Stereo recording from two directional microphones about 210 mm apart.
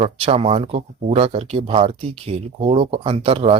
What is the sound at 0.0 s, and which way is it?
Speech, 30° right (ahead or behind).